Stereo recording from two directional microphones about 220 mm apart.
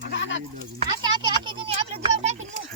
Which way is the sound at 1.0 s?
20° right (ahead or behind).